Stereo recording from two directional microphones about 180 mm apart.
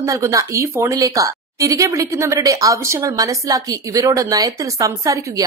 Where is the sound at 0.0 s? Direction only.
15° right (ahead or behind).